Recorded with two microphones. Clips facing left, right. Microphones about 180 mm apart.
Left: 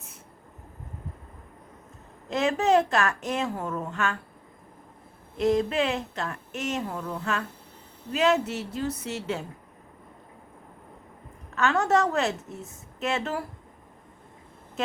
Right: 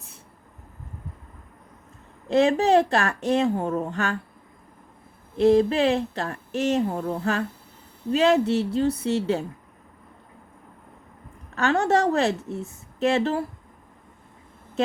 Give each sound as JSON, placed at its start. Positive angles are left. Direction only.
{"t": 2.3, "sound": "speech", "side_deg": -30}
{"t": 5.4, "sound": "speech", "side_deg": -30}
{"t": 11.5, "sound": "speech", "side_deg": -30}